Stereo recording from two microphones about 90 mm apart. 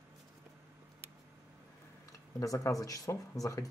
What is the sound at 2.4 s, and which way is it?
Speech, 35° left (ahead or behind).